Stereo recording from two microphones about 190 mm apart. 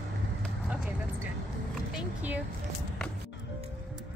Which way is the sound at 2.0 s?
10° right (ahead or behind).